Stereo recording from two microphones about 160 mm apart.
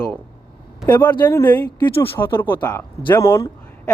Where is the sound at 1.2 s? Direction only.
15° left (ahead or behind).